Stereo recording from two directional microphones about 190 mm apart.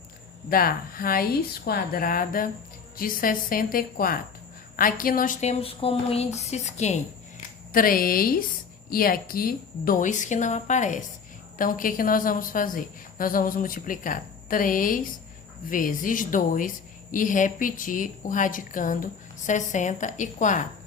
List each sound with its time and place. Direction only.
0.5 s a woman's voice: 50° left (ahead or behind)
7.7 s a woman's voice: 45° left (ahead or behind)